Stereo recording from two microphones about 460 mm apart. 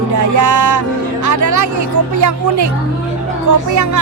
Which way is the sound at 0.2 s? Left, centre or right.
Right.